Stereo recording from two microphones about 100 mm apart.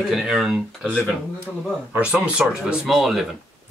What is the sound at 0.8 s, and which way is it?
Speech, 10° left (ahead or behind).